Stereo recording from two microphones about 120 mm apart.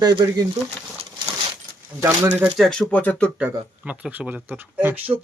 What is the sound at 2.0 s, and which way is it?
Speech, 20° right (ahead or behind).